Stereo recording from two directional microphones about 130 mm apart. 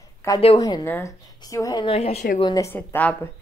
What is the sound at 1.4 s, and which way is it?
Speech, 25° left (ahead or behind).